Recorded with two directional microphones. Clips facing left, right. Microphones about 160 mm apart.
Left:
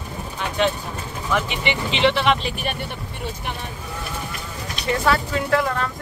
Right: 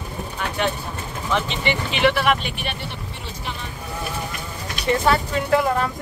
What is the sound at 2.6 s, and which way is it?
Speech, 45° left (ahead or behind).